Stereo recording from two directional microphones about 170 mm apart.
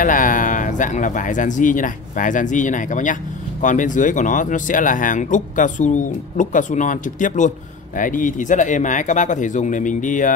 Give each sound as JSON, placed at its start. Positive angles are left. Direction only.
{"t": 0.0, "sound": "speech", "side_deg": 50}